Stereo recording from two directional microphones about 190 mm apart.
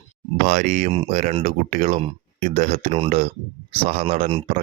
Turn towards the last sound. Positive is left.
turn(degrees=-35)  # may be behind; listen again after turning